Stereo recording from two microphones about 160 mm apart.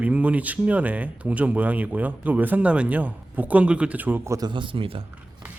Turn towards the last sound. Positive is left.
turn(degrees=-35)  # may be behind; listen again after turning